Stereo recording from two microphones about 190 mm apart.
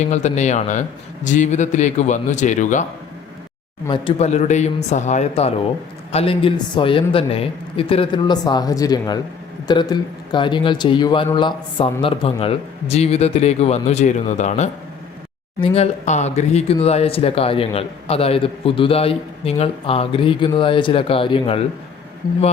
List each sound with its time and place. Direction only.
0.0 s speech: 35° left (ahead or behind)
3.8 s speech: 25° left (ahead or behind)